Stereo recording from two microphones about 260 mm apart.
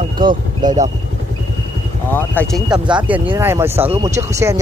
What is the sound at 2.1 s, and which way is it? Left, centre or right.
Speech, centre.